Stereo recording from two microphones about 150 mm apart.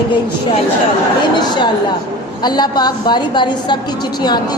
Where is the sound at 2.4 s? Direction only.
30° left (ahead or behind).